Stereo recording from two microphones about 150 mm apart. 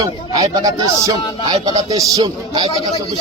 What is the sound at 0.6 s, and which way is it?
Speech, 25° right (ahead or behind).